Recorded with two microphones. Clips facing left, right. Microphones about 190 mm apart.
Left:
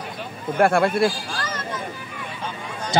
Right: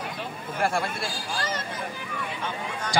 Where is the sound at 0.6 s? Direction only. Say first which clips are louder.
Left 10 dB; 60° left (ahead or behind).